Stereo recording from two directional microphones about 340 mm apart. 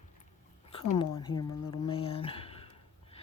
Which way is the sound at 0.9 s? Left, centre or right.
Centre.